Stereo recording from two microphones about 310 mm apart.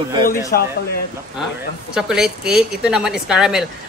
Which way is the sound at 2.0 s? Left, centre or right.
Centre.